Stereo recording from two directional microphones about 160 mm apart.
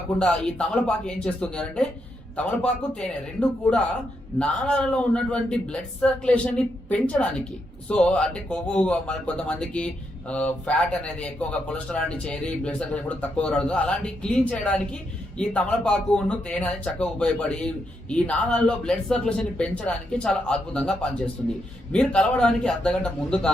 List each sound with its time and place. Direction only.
0.2 s speech: 5° left (ahead or behind)
4.4 s speech: 5° left (ahead or behind)